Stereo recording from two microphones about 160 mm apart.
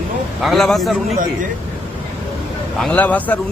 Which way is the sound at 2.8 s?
10° left (ahead or behind).